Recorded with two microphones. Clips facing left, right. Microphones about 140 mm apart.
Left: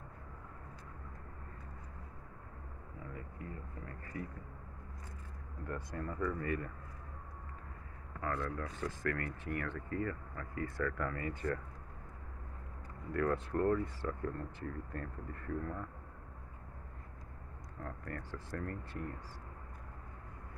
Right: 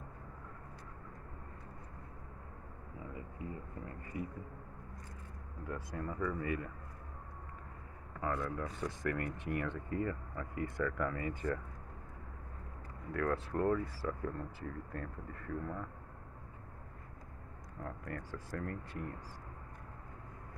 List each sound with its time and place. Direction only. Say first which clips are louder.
4.0 s speech: right 2 dB; 15° right (ahead or behind)
5.7 s speech: even; 5° right (ahead or behind)
8.2 s speech: right 1 dB; 15° right (ahead or behind)
13.1 s speech: left 1 dB; centre (ahead or behind)
17.8 s speech: right 1 dB; 10° right (ahead or behind)